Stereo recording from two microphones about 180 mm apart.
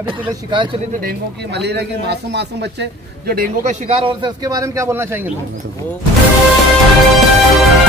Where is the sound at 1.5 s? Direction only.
70° right (ahead or behind); by 3.8 s 55° right (ahead or behind).